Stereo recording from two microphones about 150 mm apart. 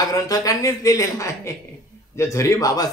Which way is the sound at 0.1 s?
25° left (ahead or behind).